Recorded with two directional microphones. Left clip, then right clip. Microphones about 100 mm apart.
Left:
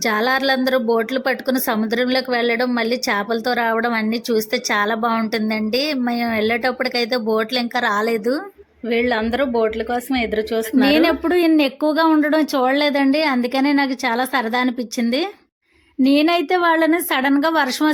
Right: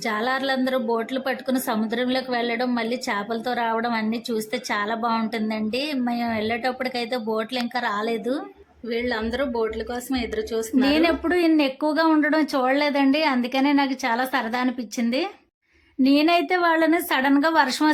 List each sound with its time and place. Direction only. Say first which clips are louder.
0.0 s a woman's voice: left 6 dB; 40° left (ahead or behind)
10.8 s a woman's voice: left 5 dB; 45° left (ahead or behind)
16.0 s a woman's voice: left 3 dB; 40° left (ahead or behind)